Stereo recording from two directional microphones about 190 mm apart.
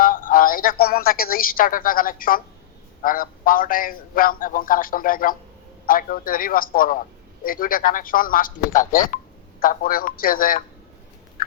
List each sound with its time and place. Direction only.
0.0 s speech: 45° left (ahead or behind)
11.4 s fowl: 50° left (ahead or behind)